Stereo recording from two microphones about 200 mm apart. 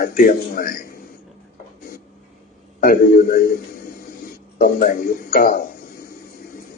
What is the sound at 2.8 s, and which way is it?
Speech, 45° left (ahead or behind).